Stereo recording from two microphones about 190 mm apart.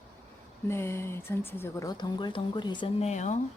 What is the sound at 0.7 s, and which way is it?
Speech, 15° left (ahead or behind).